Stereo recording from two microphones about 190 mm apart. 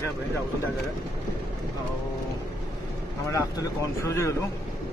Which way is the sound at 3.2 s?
15° left (ahead or behind).